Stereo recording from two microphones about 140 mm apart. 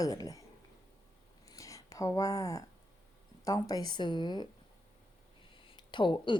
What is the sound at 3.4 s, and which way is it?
A woman's voice, 25° left (ahead or behind).